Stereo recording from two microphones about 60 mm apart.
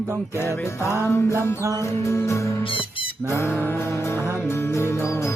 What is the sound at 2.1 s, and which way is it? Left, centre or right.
Music, left.